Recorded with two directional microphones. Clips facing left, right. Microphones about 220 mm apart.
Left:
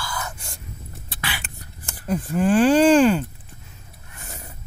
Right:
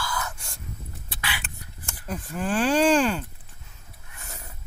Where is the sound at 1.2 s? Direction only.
40° left (ahead or behind).